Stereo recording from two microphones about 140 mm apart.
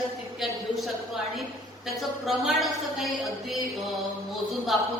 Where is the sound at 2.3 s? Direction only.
Centre (ahead or behind).